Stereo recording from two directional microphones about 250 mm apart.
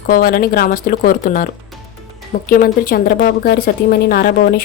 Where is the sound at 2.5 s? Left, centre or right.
Left.